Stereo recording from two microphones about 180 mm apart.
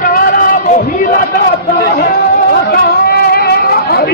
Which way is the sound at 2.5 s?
60° left (ahead or behind).